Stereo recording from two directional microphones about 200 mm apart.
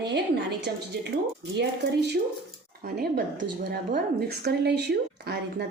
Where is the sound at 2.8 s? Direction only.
50° right (ahead or behind).